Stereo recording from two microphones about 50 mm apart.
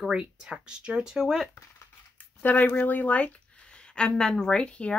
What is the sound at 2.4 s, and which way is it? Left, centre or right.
Speech, left.